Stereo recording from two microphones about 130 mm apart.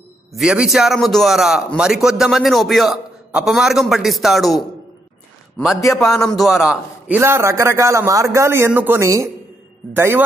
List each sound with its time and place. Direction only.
0.3 s a man's voice: 5° right (ahead or behind)
5.9 s a man's voice: centre (ahead or behind)
7.2 s a man's voice: 20° right (ahead or behind)